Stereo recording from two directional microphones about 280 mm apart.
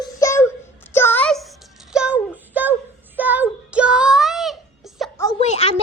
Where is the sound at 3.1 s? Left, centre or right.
Centre.